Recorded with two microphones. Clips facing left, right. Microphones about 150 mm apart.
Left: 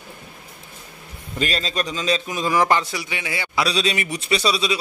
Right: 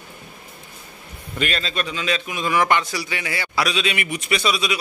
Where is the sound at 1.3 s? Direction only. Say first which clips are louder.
Left 1 dB; 35° left (ahead or behind).